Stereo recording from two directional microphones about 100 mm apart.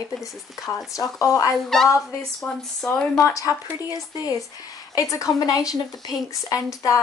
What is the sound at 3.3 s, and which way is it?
A woman's voice, 35° left (ahead or behind).